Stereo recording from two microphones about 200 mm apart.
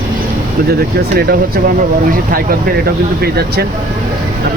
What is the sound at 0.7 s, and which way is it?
Speech, 50° right (ahead or behind).